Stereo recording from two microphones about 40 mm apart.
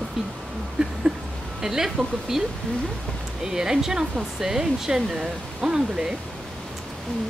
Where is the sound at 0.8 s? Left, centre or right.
Right.